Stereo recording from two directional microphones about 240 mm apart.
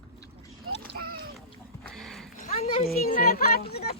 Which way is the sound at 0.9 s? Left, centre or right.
Right.